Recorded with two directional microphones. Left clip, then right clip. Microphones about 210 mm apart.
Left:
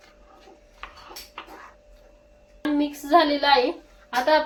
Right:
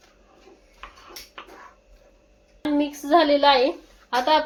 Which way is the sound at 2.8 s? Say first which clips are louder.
Even; 35° right (ahead or behind).